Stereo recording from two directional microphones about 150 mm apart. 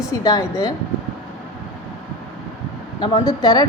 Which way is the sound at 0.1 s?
25° left (ahead or behind).